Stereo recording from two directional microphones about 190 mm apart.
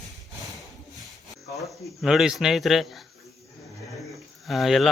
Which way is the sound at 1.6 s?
Centre (ahead or behind).